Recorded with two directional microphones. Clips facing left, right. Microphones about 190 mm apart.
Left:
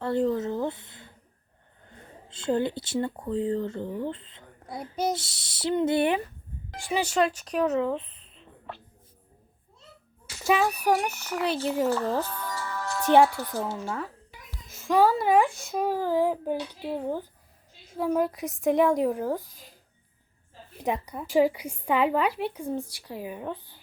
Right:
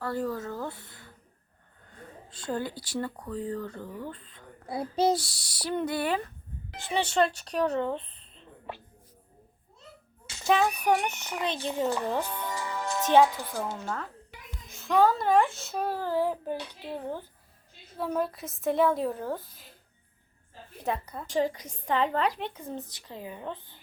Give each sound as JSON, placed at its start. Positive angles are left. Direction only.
{"t": 0.0, "sound": "a woman's voice", "side_deg": 25}
{"t": 6.7, "sound": "speech", "side_deg": 10}
{"t": 10.4, "sound": "a child's voice", "side_deg": 5}
{"t": 11.5, "sound": "speech", "side_deg": -15}
{"t": 13.8, "sound": "a woman's voice", "side_deg": 10}
{"t": 20.8, "sound": "a woman's voice", "side_deg": 15}